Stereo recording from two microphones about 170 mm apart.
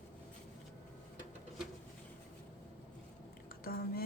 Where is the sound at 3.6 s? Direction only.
60° left (ahead or behind).